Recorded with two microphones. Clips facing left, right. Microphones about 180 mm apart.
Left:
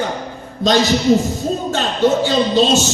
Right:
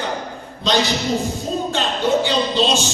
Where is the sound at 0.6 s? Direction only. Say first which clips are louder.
Left 4 dB; 40° left (ahead or behind).